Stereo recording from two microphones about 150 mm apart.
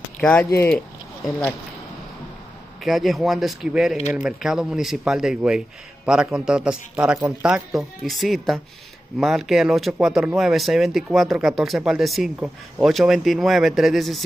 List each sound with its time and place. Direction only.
0.2 s speech: 10° left (ahead or behind)
2.8 s speech: centre (ahead or behind)